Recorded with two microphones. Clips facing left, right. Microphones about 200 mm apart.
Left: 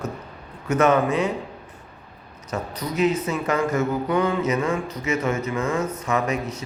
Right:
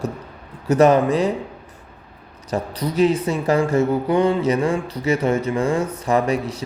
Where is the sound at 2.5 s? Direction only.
30° right (ahead or behind).